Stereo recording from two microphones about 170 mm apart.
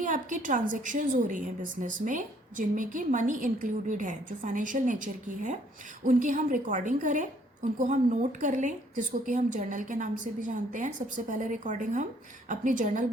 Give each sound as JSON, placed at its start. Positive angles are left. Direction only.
{"t": 0.0, "sound": "a woman's voice", "side_deg": -50}